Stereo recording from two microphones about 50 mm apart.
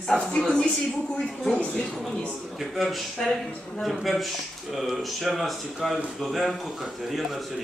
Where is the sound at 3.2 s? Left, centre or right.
Centre.